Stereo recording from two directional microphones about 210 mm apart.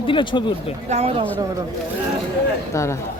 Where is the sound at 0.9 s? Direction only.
30° right (ahead or behind).